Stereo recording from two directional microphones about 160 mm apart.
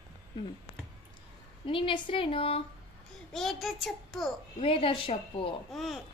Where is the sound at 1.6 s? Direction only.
35° left (ahead or behind).